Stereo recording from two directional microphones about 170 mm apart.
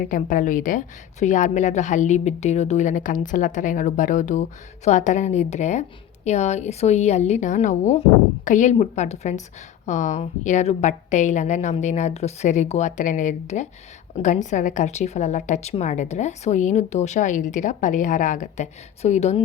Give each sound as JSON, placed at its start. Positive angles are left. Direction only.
{"t": 0.0, "sound": "a woman's voice", "side_deg": 50}